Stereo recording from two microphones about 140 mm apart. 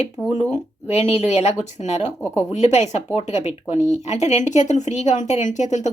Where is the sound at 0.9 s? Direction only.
50° left (ahead or behind).